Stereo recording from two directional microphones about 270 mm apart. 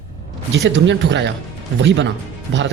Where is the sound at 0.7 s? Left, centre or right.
Right.